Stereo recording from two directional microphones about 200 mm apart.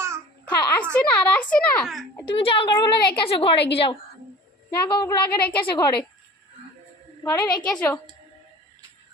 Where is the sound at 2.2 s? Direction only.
25° left (ahead or behind).